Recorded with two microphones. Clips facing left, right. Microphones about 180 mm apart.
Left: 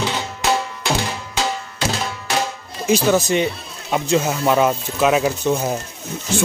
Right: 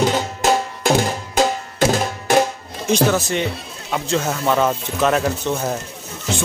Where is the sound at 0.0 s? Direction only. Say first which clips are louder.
Right 5 dB; 45° right (ahead or behind).